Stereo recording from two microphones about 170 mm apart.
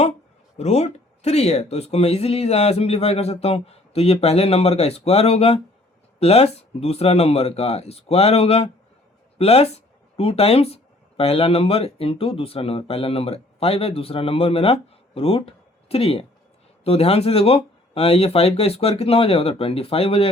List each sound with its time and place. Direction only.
0.5 s speech: 40° left (ahead or behind)